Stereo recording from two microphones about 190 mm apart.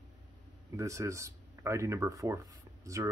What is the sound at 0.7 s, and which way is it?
Speech, 15° right (ahead or behind).